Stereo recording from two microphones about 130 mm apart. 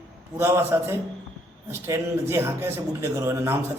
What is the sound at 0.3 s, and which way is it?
A man's voice, 20° right (ahead or behind).